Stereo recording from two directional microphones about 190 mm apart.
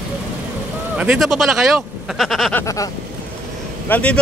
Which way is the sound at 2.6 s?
15° left (ahead or behind).